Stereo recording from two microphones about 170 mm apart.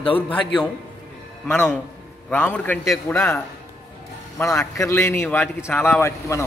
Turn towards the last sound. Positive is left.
turn(degrees=15)  # may be behind; listen again after turning